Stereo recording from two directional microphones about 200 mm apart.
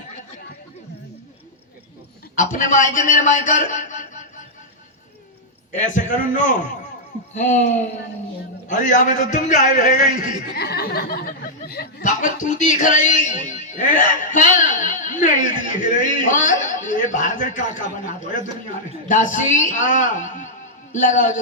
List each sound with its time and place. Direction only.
2.3 s a man's voice: 40° left (ahead or behind)
5.7 s speech: 40° left (ahead or behind)
19.0 s speech: 40° left (ahead or behind)